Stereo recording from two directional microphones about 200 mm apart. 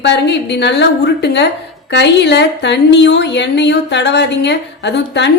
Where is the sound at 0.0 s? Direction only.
60° left (ahead or behind).